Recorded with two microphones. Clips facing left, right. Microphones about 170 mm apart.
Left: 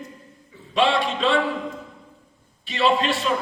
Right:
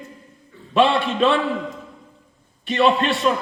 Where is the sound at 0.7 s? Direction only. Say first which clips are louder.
Right 3 dB; 60° right (ahead or behind).